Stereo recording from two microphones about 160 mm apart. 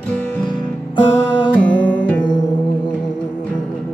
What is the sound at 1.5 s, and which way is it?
Music, 10° left (ahead or behind).